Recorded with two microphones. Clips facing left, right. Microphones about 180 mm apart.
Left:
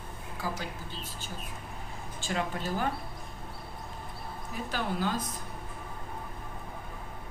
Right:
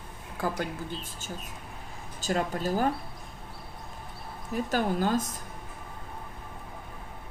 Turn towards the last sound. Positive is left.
turn(degrees=-45)  # may be behind; listen again after turning